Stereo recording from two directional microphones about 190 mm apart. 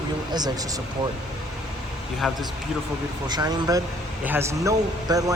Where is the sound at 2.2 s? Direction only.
Centre (ahead or behind).